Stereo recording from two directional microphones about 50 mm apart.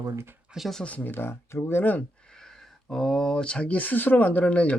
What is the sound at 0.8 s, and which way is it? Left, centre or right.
Speech, left.